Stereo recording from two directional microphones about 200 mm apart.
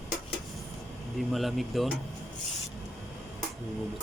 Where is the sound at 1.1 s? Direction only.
Centre (ahead or behind).